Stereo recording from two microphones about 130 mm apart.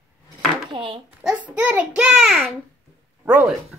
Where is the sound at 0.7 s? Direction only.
40° right (ahead or behind).